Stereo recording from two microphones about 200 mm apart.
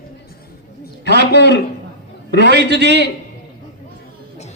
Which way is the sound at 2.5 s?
60° right (ahead or behind).